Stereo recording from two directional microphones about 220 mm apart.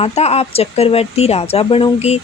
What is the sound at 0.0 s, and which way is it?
Speech, 30° left (ahead or behind).